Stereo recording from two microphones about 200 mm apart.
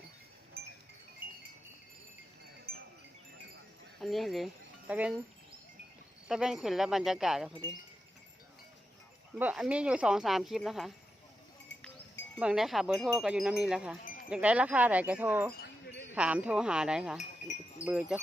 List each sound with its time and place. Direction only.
0.6 s wind chime: 50° right (ahead or behind)
2.7 s wind chime: 50° right (ahead or behind)
4.0 s speech: centre (ahead or behind)
6.2 s speech: 5° right (ahead or behind)
9.4 s speech: 5° right (ahead or behind)
11.7 s cowbell: 65° left (ahead or behind)
12.4 s speech: 5° right (ahead or behind)
14.3 s wind chime: 5° right (ahead or behind)
16.1 s speech: 5° right (ahead or behind)
17.8 s wind chime: 5° right (ahead or behind)